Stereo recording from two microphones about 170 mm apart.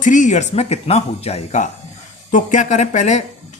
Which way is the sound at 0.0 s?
50° left (ahead or behind).